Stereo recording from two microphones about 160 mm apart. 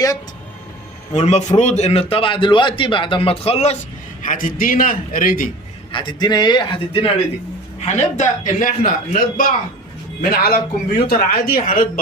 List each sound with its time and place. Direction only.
1.1 s a man's voice: 45° left (ahead or behind)
4.2 s a man's voice: 55° left (ahead or behind)
5.9 s a man's voice: 30° left (ahead or behind)
7.9 s a man's voice: 50° left (ahead or behind)